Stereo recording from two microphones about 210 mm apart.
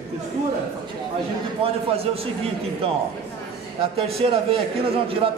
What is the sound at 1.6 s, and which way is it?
A man's voice, 25° right (ahead or behind).